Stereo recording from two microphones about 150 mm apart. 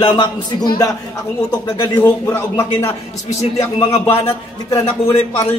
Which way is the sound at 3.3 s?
45° left (ahead or behind).